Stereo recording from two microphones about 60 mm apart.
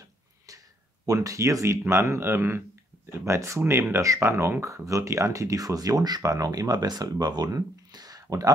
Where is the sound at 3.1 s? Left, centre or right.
Right.